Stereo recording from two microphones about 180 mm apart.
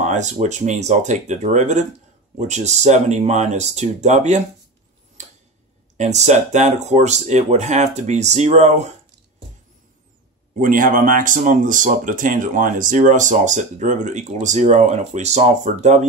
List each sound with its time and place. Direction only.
0.0 s speech: 40° right (ahead or behind)
5.2 s a sound: 40° right (ahead or behind)
5.9 s speech: 40° right (ahead or behind)
10.6 s speech: 50° right (ahead or behind)